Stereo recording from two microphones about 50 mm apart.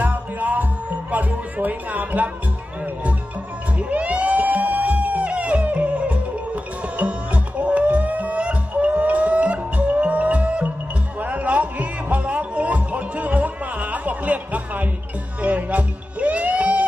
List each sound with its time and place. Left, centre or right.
0.0 s music: right
1.1 s speech: right
3.7 s music: right